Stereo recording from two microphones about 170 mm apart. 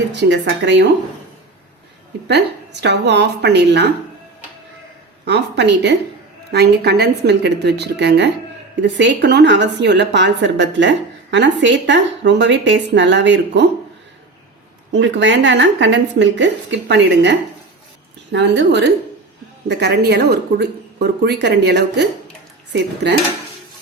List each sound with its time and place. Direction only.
0.1 s a woman's voice: 85° right
2.8 s speech: 85° right
5.2 s speech: 90° right
6.5 s a woman's voice: 75° right (ahead or behind); by 13.7 s 90° right
14.9 s a woman's voice: 90° right
19.6 s a woman's voice: 75° right (ahead or behind)